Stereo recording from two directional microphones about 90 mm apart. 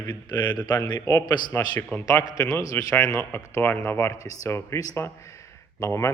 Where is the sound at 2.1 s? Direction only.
35° left (ahead or behind).